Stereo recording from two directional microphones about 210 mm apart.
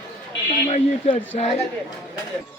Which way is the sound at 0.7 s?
35° left (ahead or behind).